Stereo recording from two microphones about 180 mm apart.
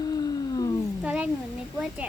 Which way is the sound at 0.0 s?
20° left (ahead or behind).